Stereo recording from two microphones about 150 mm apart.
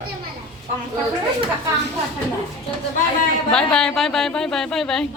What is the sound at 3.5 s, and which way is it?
Speech, 5° left (ahead or behind).